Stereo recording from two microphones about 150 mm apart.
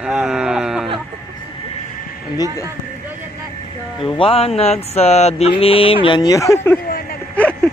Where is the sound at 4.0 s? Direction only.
35° left (ahead or behind).